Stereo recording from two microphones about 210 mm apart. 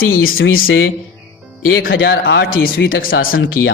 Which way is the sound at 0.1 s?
75° left (ahead or behind).